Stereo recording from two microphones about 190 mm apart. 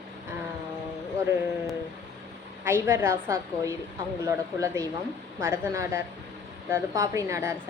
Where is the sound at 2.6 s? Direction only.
15° right (ahead or behind).